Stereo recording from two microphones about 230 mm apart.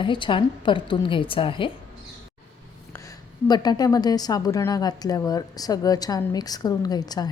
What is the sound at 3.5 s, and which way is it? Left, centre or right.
A woman's voice, centre.